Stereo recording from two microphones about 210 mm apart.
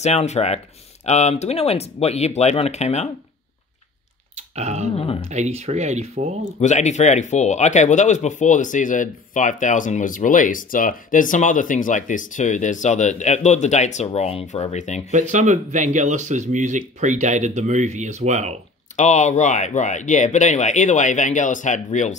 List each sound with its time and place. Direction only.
0.0 s speech: 30° left (ahead or behind)
4.6 s speech: 30° right (ahead or behind)
4.9 s speech: 25° left (ahead or behind)
5.3 s speech: 30° right (ahead or behind)
6.6 s speech: 35° left (ahead or behind)
15.0 s speech: 35° right (ahead or behind)
18.9 s speech: 35° left (ahead or behind)